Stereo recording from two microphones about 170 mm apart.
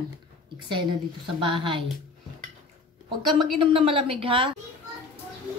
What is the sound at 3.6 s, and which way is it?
Speech, 30° right (ahead or behind).